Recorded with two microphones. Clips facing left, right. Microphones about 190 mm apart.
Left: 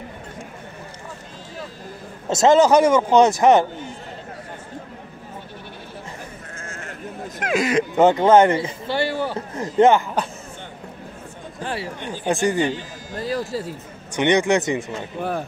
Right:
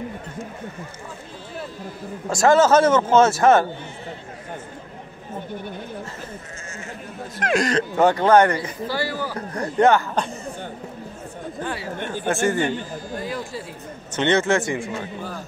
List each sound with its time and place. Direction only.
2.2 s speech: 20° left (ahead or behind)
6.6 s sheep: 55° left (ahead or behind)
7.4 s speech: 5° left (ahead or behind)
7.9 s a man's voice: 20° left (ahead or behind)
11.6 s speech: 25° left (ahead or behind)
12.0 s speech: 15° left (ahead or behind)
13.1 s a sound: 40° left (ahead or behind)
14.1 s speech: 15° left (ahead or behind)
15.1 s speech: 60° left (ahead or behind)